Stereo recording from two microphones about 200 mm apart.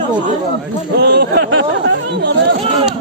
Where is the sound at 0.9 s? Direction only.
55° right (ahead or behind).